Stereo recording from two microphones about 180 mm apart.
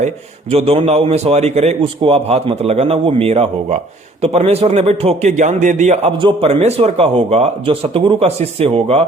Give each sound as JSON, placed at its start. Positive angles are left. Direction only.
{"t": 0.5, "sound": "a man's voice", "side_deg": -35}